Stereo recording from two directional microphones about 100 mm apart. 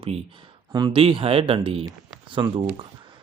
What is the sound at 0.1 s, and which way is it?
Speech, 80° right.